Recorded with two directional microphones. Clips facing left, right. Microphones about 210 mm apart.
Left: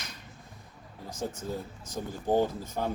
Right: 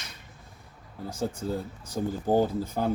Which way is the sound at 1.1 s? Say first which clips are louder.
Right 4 dB; 30° right (ahead or behind).